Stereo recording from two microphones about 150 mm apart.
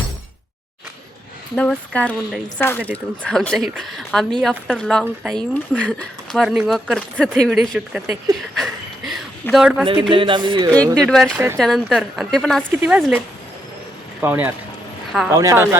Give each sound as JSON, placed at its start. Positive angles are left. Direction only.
{"t": 1.5, "sound": "speech", "side_deg": 5}
{"t": 3.2, "sound": "a woman's voice", "side_deg": 5}
{"t": 8.3, "sound": "a sound", "side_deg": 0}
{"t": 9.8, "sound": "speech", "side_deg": -35}
{"t": 10.9, "sound": "a woman's voice", "side_deg": 0}